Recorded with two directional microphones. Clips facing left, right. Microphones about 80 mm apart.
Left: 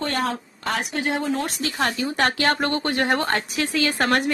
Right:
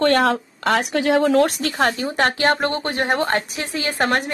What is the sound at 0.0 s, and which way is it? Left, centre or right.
Speech, right.